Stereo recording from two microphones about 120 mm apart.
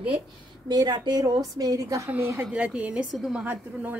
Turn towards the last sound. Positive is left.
turn(degrees=-15)  # may be behind; listen again after turning